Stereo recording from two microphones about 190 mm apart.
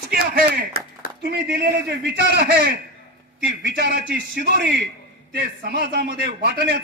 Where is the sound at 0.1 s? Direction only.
50° right (ahead or behind).